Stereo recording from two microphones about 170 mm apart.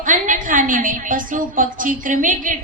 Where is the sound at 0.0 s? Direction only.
50° right (ahead or behind).